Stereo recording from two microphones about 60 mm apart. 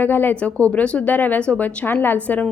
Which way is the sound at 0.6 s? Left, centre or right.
Left.